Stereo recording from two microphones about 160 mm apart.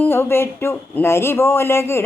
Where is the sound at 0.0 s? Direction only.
15° left (ahead or behind).